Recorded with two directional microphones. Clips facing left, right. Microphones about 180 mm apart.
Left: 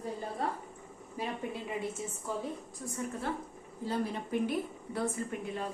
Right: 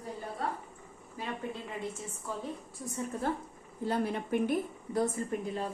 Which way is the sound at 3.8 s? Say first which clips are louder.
Right 2 dB; 60° right (ahead or behind).